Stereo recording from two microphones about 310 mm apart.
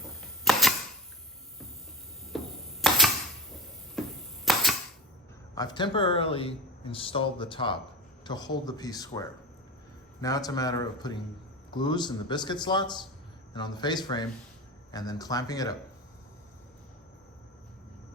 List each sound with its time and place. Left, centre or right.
0.0 s typewriter: centre
2.3 s typewriter: centre
3.5 s a sound: centre
5.5 s speech: centre